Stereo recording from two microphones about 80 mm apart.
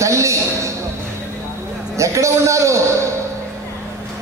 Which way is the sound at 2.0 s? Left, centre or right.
Right.